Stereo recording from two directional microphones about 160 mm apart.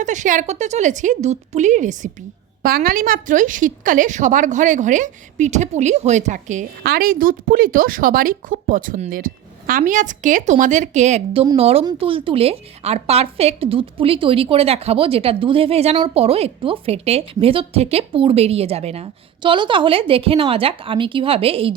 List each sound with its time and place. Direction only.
0.0 s a woman's voice: 50° right (ahead or behind)
2.6 s a woman's voice: 65° right (ahead or behind); by 6.7 s 50° right (ahead or behind)
6.8 s a woman's voice: 70° right (ahead or behind); by 21.8 s 35° right (ahead or behind)